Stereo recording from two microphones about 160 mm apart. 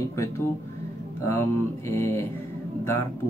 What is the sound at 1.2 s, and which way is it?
Speech, 15° left (ahead or behind).